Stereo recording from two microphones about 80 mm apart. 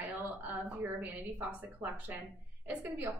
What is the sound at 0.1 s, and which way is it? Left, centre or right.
A woman's voice, right.